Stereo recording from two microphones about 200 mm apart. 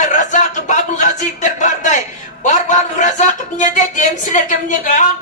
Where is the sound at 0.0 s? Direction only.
40° left (ahead or behind).